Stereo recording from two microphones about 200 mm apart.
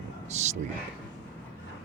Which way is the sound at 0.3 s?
35° right (ahead or behind).